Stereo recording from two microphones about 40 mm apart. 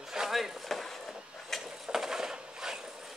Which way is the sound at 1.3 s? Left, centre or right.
Centre.